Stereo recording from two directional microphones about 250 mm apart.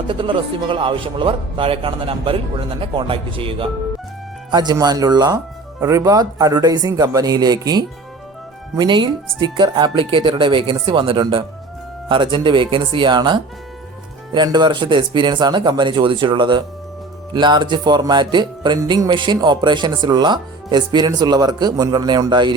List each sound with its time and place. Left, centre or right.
0.1 s speech: centre